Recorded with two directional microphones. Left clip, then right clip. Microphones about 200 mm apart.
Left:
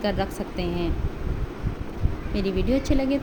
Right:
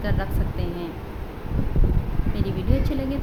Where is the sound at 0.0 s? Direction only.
30° left (ahead or behind).